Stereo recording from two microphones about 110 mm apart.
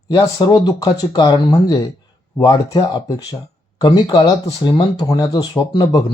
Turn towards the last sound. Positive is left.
turn(degrees=35)  # may be behind; listen again after turning